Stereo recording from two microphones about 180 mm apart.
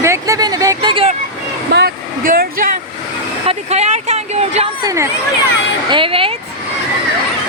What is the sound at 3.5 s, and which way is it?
Speech, 35° right (ahead or behind).